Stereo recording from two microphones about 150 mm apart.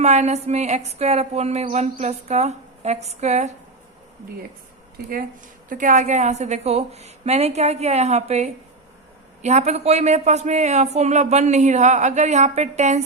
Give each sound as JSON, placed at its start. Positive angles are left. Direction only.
{"t": 0.0, "sound": "a man's voice", "side_deg": -50}
{"t": 5.6, "sound": "a man's voice", "side_deg": -60}